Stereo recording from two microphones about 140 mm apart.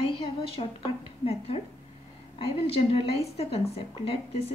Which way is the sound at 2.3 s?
40° left (ahead or behind).